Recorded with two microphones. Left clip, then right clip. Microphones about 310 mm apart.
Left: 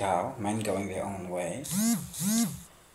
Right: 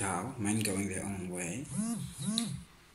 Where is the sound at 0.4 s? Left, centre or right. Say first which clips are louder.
Left 4 dB; centre.